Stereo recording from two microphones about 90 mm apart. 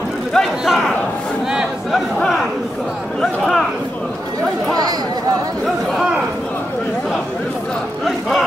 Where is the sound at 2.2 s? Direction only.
Centre (ahead or behind).